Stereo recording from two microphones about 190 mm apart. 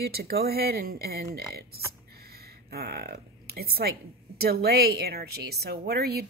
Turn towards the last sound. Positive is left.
turn(degrees=-55)  # may be behind; listen again after turning